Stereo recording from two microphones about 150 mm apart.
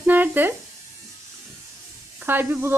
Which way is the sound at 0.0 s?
15° right (ahead or behind).